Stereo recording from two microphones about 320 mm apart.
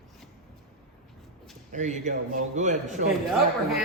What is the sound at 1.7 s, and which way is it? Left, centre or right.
A man's voice, right.